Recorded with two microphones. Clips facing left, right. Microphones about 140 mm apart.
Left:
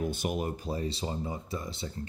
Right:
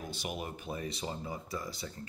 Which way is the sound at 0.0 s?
50° left (ahead or behind).